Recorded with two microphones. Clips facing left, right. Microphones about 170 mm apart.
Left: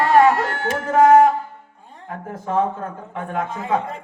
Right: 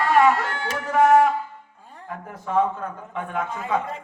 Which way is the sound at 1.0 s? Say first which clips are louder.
Left 4 dB; 25° left (ahead or behind).